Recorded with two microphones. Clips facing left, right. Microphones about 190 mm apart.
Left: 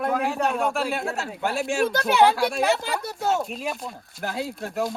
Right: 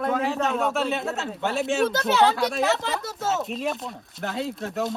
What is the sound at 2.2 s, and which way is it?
Speech, 15° left (ahead or behind).